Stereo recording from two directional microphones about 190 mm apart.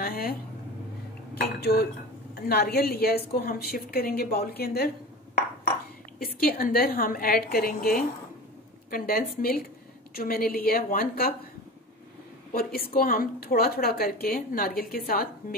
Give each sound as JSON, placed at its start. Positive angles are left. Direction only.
{"t": 0.0, "sound": "a sound", "side_deg": 55}
{"t": 1.3, "sound": "a woman's voice", "side_deg": 55}
{"t": 6.1, "sound": "a woman's voice", "side_deg": 50}
{"t": 12.5, "sound": "a woman's voice", "side_deg": 55}